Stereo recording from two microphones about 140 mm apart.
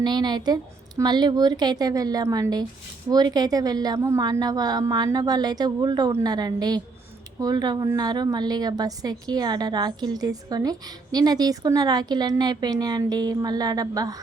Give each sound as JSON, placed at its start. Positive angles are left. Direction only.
{"t": 0.0, "sound": "a woman's voice", "side_deg": -30}